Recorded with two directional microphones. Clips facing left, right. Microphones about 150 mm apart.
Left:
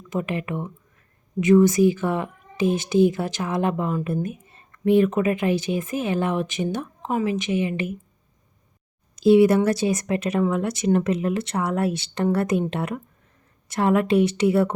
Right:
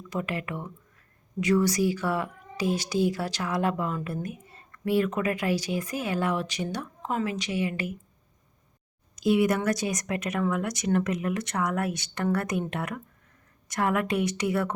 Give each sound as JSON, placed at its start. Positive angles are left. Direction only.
{"t": 0.1, "sound": "speech", "side_deg": 20}
{"t": 9.1, "sound": "speech", "side_deg": 30}